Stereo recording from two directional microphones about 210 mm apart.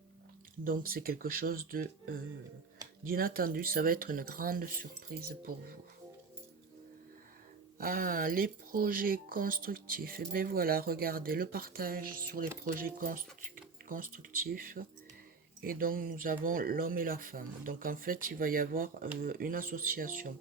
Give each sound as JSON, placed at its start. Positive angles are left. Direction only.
{"t": 0.6, "sound": "speech", "side_deg": -40}
{"t": 7.8, "sound": "speech", "side_deg": -45}